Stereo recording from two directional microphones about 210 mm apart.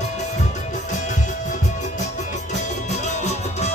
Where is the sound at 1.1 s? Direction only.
35° left (ahead or behind).